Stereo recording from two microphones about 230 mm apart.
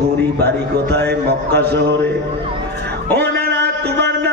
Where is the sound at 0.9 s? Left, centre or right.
Right.